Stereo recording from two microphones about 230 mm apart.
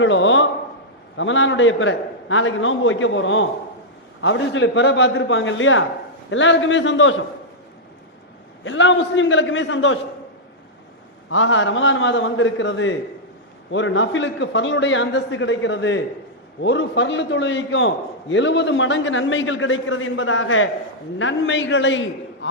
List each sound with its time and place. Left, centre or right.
0.0 s a man's voice: left
8.6 s a man's voice: left
11.3 s a man's voice: left